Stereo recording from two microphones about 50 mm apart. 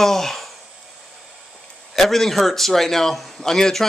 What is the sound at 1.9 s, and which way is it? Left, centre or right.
A man's voice, centre.